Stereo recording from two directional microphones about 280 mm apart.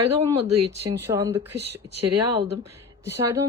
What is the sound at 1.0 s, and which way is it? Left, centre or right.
Speech, centre.